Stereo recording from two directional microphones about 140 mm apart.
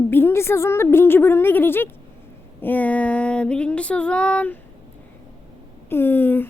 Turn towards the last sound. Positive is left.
turn(degrees=15)  # may be behind; listen again after turning